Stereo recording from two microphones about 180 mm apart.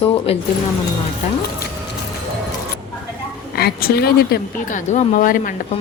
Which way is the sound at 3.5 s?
60° left (ahead or behind).